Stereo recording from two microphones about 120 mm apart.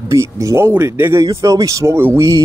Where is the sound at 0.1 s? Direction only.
25° right (ahead or behind).